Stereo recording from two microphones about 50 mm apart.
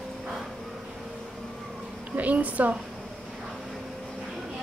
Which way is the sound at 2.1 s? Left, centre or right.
Right.